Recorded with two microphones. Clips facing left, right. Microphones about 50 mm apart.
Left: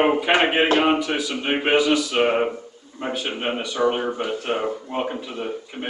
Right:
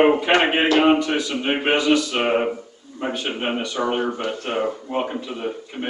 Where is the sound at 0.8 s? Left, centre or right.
Centre.